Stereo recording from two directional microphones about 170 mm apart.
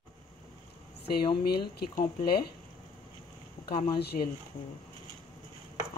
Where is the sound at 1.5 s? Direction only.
70° left (ahead or behind).